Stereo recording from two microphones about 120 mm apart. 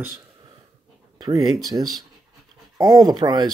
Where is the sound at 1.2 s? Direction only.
30° right (ahead or behind).